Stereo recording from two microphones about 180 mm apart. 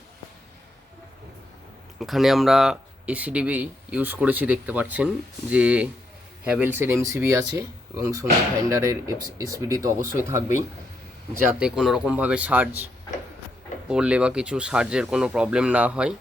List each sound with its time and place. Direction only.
2.0 s speech: centre (ahead or behind)
11.4 s speech: 5° right (ahead or behind)